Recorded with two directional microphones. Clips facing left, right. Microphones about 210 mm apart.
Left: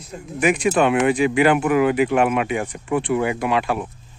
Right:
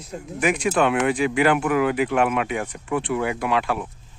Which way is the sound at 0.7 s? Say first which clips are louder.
Left 2 dB; 10° left (ahead or behind).